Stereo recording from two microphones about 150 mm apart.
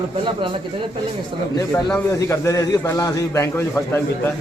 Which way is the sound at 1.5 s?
15° left (ahead or behind).